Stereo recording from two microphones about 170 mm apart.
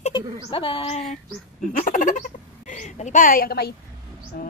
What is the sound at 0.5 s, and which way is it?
A woman's voice, 30° left (ahead or behind).